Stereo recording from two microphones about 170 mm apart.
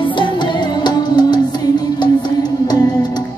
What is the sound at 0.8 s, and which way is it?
Music, 25° left (ahead or behind).